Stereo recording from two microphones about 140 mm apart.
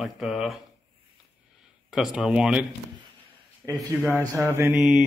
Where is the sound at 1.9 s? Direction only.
5° right (ahead or behind).